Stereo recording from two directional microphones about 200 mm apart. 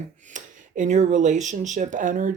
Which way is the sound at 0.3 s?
40° right (ahead or behind).